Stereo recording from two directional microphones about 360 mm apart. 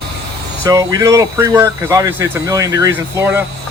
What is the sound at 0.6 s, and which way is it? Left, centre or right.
Speech, centre.